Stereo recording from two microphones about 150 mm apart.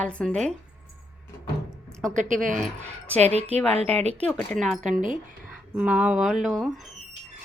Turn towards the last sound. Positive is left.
turn(degrees=0)  # may be behind; listen again after turning